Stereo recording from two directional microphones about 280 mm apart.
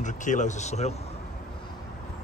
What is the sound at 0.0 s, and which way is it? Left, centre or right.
Speech, left.